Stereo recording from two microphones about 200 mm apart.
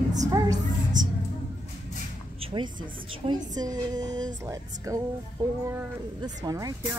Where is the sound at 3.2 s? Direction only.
20° right (ahead or behind).